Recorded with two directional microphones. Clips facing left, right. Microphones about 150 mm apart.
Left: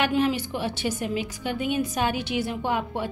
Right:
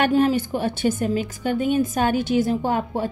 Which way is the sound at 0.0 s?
45° right (ahead or behind).